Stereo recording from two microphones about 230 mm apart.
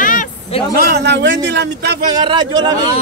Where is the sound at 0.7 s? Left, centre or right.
Right.